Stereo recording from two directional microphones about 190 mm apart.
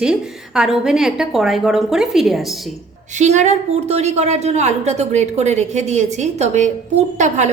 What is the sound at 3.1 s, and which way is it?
A woman's voice, 40° right (ahead or behind).